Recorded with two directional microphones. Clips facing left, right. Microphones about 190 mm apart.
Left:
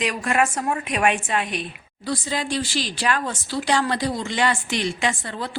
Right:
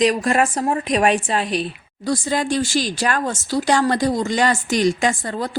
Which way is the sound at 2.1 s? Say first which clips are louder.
Right 5 dB; 50° right (ahead or behind).